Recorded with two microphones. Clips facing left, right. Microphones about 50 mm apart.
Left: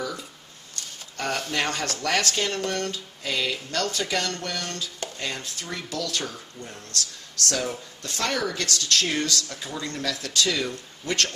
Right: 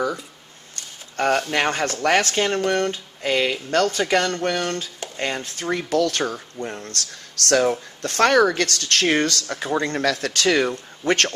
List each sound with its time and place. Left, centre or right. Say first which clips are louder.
1.1 s speech: right 7 dB; right